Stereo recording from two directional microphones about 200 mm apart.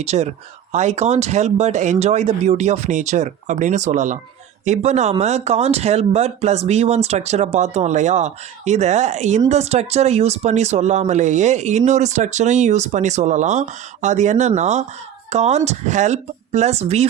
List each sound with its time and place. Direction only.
0.0 s speech: 35° right (ahead or behind)